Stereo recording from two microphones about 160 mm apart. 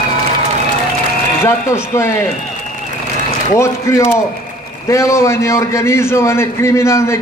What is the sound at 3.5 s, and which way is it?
A man's voice, 15° left (ahead or behind).